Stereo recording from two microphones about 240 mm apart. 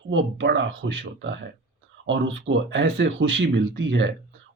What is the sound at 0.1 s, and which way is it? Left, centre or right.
Speech, right.